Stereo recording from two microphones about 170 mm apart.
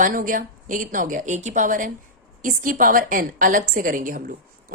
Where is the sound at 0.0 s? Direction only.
55° right (ahead or behind).